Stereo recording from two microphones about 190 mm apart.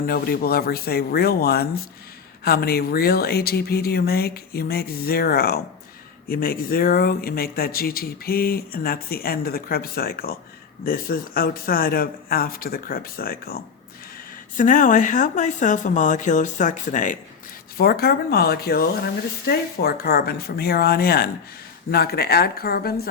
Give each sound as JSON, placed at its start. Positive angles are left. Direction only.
{"t": 0.0, "sound": "speech", "side_deg": 50}
{"t": 17.7, "sound": "speech", "side_deg": 55}